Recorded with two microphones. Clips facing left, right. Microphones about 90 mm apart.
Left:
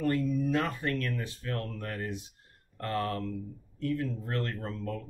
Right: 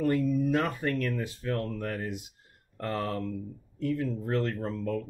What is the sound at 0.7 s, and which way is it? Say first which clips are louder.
Speech: right 2 dB; 15° right (ahead or behind).